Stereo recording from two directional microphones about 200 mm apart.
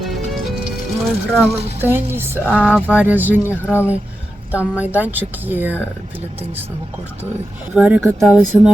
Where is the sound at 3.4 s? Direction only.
10° left (ahead or behind).